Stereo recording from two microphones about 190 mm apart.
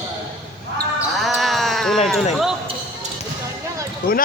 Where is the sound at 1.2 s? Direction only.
Centre (ahead or behind).